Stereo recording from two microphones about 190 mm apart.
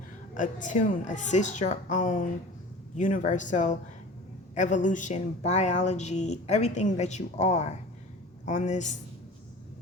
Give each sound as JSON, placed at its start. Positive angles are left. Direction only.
{"t": 0.3, "sound": "speech", "side_deg": 40}